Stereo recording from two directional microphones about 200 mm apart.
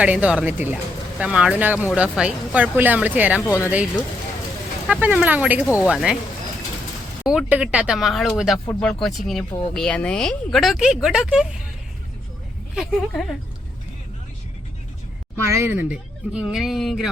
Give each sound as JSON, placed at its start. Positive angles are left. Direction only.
{"t": 0.0, "sound": "speech", "side_deg": -5}
{"t": 4.9, "sound": "speech", "side_deg": -5}
{"t": 7.3, "sound": "speech", "side_deg": -5}
{"t": 8.5, "sound": "speech", "side_deg": 15}
{"t": 8.8, "sound": "speech", "side_deg": 0}
{"t": 12.7, "sound": "speech", "side_deg": 0}
{"t": 15.4, "sound": "speech", "side_deg": -10}